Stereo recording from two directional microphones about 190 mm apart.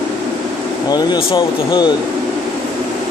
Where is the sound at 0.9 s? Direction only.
20° left (ahead or behind).